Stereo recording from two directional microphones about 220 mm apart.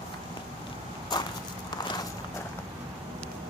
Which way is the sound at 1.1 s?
20° left (ahead or behind).